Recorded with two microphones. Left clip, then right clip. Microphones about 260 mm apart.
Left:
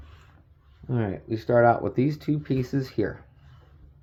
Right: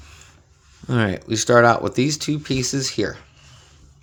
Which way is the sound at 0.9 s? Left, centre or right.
Right.